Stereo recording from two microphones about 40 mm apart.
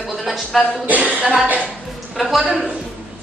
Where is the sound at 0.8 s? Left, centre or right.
Right.